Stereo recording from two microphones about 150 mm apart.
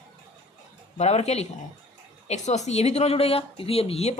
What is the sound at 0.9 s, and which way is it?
Speech, 45° left (ahead or behind).